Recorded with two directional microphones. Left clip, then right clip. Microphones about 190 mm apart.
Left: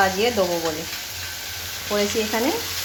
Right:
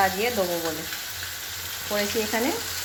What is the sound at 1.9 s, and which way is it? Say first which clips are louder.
Frying: left 4 dB; centre (ahead or behind).